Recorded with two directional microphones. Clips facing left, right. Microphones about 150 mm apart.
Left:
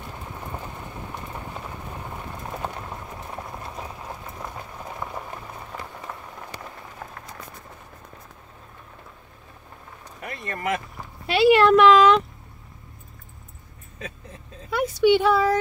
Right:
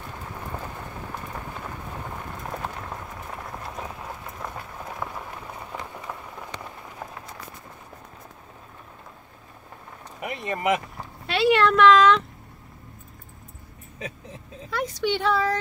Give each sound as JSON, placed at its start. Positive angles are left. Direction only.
{"t": 6.1, "sound": "rain on surface", "side_deg": -10}
{"t": 10.2, "sound": "speech", "side_deg": -15}
{"t": 11.2, "sound": "speech", "side_deg": 5}
{"t": 14.7, "sound": "speech", "side_deg": 10}